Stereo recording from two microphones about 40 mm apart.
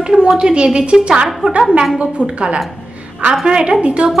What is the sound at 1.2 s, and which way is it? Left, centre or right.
Speech, centre.